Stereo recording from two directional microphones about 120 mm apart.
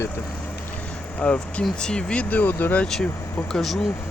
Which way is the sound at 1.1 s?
10° left (ahead or behind).